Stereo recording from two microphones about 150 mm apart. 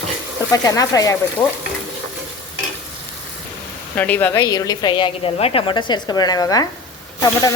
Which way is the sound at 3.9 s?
10° left (ahead or behind).